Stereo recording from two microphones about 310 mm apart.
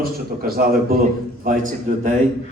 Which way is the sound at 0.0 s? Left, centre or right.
Right.